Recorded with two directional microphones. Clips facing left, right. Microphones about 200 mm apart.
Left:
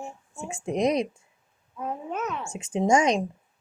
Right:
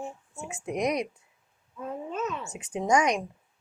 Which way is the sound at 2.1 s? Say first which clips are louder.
Even; 65° left (ahead or behind).